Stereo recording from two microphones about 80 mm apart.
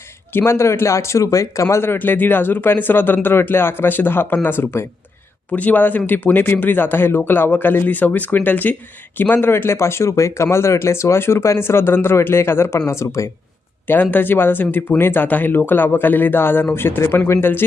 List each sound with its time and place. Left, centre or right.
0.3 s speech: left
1.7 s speech: left
13.8 s speech: left